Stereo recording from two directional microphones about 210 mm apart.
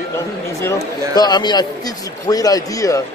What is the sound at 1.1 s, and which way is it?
A man's voice, 20° left (ahead or behind).